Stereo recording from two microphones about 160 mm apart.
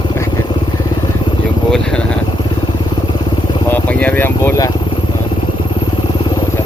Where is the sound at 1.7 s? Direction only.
5° left (ahead or behind).